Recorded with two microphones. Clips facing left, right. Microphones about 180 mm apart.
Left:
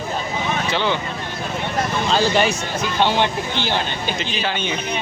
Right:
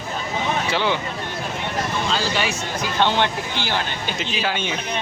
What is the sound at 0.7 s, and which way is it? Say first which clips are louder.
Speech: left 1 dB; 10° right (ahead or behind).